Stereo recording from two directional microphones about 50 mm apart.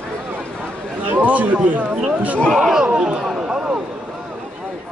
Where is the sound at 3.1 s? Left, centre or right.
Right.